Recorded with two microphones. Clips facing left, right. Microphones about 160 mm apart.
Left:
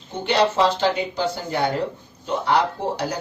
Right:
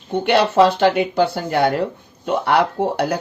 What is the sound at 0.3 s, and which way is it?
Speech, 65° right (ahead or behind).